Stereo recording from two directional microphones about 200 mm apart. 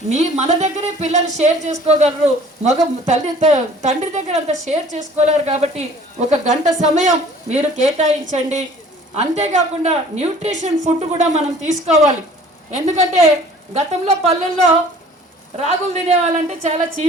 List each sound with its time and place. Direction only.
0.1 s a woman's voice: 35° right (ahead or behind)